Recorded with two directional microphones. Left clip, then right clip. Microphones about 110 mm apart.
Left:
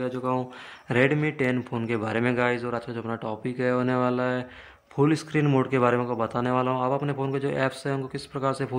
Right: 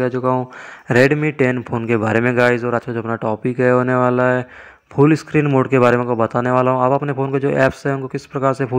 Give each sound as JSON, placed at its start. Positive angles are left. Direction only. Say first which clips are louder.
{"t": 0.0, "sound": "speech", "louder": "right 11 dB", "side_deg": -55}
{"t": 0.8, "sound": "speech", "louder": "right 9 dB", "side_deg": -40}